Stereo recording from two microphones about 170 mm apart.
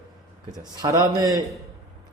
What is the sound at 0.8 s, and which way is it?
Speech, 20° right (ahead or behind).